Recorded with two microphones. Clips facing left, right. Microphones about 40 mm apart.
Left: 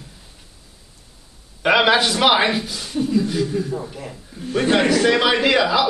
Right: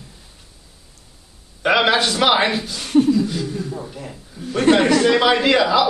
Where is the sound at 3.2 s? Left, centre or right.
Centre.